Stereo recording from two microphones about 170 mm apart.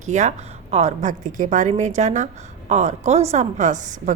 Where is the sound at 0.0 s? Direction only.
45° right (ahead or behind).